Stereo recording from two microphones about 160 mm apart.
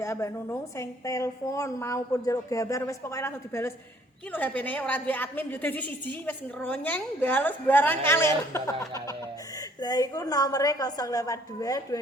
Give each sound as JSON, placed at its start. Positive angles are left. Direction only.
{"t": 0.0, "sound": "a woman's voice", "side_deg": 20}